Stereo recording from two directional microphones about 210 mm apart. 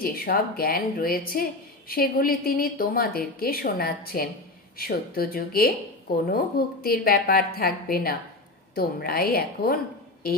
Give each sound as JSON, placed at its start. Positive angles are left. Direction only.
{"t": 0.0, "sound": "a woman's voice", "side_deg": 45}